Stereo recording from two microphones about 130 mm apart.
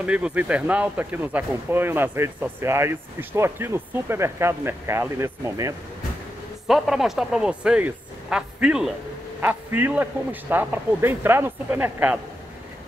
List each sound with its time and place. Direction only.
0.0 s speech: 10° right (ahead or behind)
6.7 s speech: 5° right (ahead or behind)